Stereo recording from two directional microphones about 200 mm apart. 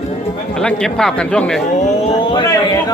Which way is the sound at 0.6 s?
5° left (ahead or behind).